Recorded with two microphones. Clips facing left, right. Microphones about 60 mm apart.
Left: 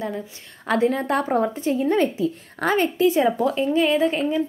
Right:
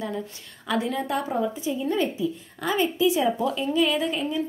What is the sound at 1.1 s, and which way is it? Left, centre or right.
A woman's voice, left.